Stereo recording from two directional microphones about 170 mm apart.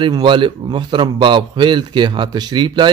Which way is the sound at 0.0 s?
30° right (ahead or behind).